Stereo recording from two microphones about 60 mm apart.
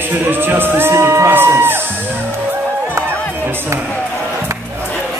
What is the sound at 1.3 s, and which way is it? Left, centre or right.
Music, right.